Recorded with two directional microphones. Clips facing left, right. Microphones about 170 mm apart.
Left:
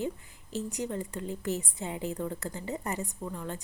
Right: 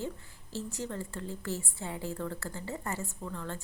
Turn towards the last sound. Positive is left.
turn(degrees=15)  # may be behind; listen again after turning